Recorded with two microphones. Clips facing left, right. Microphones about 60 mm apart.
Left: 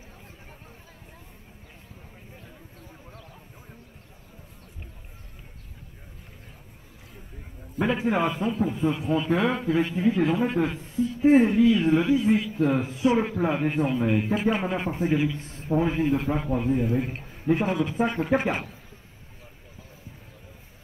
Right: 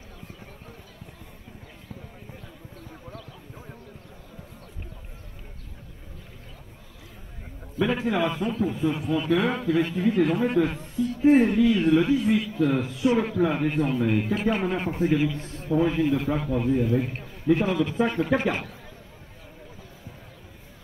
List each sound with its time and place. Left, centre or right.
2.9 s a sound: right
7.7 s a man's voice: left
11.5 s a man's voice: right
11.8 s a man's voice: left
15.3 s a man's voice: right
15.7 s a man's voice: left